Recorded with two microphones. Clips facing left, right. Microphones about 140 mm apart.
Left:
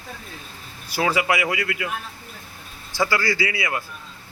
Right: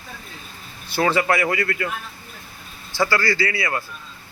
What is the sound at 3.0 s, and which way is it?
Speech, 15° left (ahead or behind).